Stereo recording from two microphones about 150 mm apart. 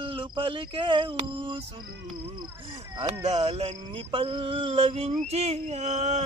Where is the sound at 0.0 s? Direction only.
35° right (ahead or behind).